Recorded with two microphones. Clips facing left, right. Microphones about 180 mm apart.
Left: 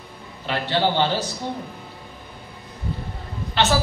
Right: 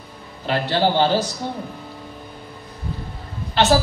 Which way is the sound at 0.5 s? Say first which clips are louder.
Right 3 dB; 40° right (ahead or behind).